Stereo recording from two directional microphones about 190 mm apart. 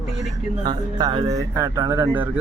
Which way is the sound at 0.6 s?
20° right (ahead or behind).